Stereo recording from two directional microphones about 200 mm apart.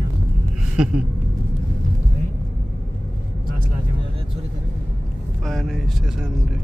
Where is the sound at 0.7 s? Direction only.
5° right (ahead or behind).